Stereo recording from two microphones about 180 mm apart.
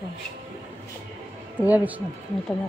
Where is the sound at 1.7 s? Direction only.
10° right (ahead or behind).